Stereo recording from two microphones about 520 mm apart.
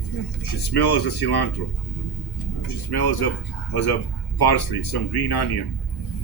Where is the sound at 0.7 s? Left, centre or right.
Left.